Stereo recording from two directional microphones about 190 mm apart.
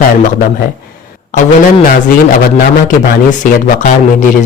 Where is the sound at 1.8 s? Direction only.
45° left (ahead or behind).